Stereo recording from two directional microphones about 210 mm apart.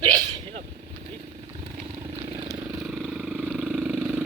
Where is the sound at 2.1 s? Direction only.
20° right (ahead or behind).